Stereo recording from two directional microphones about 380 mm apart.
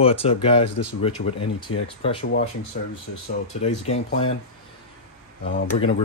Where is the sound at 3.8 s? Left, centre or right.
Centre.